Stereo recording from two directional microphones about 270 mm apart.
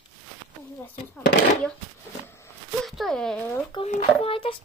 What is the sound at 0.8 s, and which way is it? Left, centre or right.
Speech, centre.